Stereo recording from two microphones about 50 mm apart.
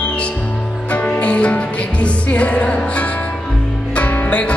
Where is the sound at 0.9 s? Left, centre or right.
Left.